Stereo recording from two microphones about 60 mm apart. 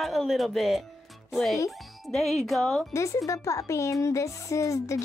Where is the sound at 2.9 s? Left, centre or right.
Left.